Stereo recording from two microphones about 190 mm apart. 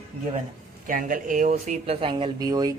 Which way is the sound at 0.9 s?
45° right (ahead or behind).